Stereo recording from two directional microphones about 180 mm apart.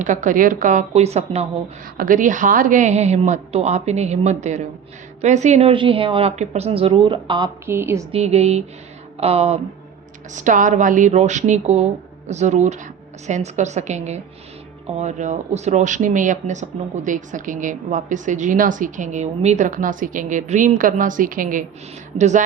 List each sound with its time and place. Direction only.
0.0 s speech: 45° right (ahead or behind)
2.0 s a woman's voice: 45° right (ahead or behind); by 7.5 s 25° right (ahead or behind)
7.7 s a woman's voice: 15° right (ahead or behind)
8.1 s a woman's voice: 35° right (ahead or behind)